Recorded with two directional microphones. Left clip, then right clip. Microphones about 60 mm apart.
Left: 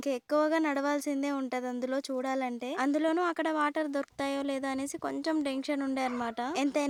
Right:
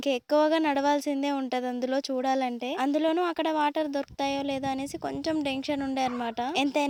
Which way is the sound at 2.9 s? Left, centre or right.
Right.